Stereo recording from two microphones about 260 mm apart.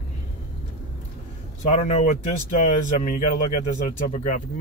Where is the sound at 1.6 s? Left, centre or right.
Left.